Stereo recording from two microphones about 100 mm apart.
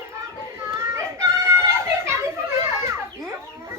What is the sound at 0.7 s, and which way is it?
Chicken, 25° right (ahead or behind).